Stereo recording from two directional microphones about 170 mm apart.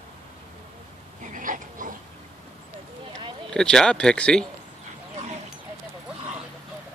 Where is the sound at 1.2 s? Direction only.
50° right (ahead or behind).